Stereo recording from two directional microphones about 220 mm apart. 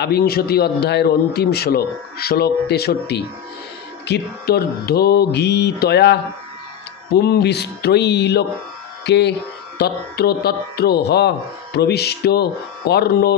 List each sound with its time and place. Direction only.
0.0 s speech: 45° left (ahead or behind)
7.2 s speech: 45° left (ahead or behind)